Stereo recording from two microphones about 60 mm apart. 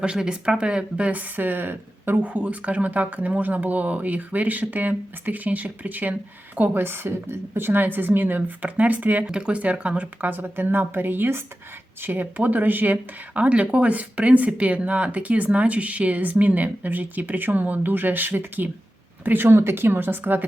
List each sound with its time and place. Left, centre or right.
0.0 s speech: centre; by 2.3 s right
2.3 s a woman's voice: right